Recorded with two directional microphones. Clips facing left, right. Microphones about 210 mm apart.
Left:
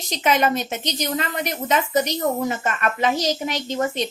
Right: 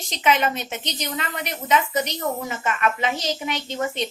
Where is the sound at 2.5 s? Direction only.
40° left (ahead or behind).